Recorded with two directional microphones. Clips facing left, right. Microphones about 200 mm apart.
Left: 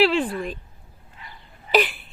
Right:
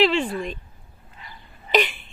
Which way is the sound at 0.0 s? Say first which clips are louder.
Even; 5° left (ahead or behind).